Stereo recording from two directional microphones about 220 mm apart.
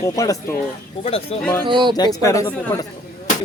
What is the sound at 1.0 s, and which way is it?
Speech, 25° left (ahead or behind).